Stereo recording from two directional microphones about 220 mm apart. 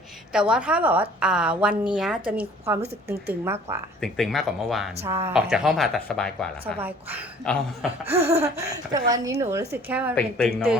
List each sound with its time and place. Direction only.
0.3 s a woman's voice: 5° right (ahead or behind)
4.0 s a woman's voice: centre (ahead or behind)
5.0 s a woman's voice: 10° right (ahead or behind)
6.7 s a woman's voice: 10° right (ahead or behind)
7.4 s a woman's voice: 5° left (ahead or behind)
8.1 s a sound: 25° right (ahead or behind)
8.9 s a woman's voice: 15° right (ahead or behind); by 10.6 s centre (ahead or behind)